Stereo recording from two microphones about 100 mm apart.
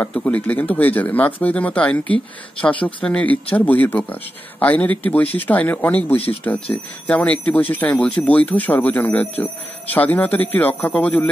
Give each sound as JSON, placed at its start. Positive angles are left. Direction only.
{"t": 0.1, "sound": "speech", "side_deg": 15}